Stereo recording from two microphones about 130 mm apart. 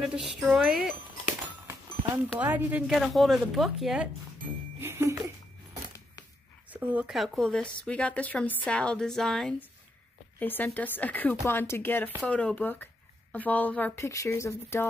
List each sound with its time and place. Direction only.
0.0 s speech: 5° right (ahead or behind)
2.3 s speech: 15° right (ahead or behind)
2.9 s speech: centre (ahead or behind)
4.7 s music: 20° right (ahead or behind)
6.7 s speech: 10° right (ahead or behind)
7.2 s speech: 5° left (ahead or behind)
10.4 s speech: 15° left (ahead or behind)